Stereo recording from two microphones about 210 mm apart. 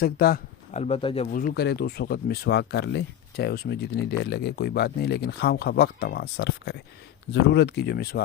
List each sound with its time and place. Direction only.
0.0 s speech: 45° left (ahead or behind)
0.7 s speech: 30° left (ahead or behind)
1.3 s speech: 40° left (ahead or behind)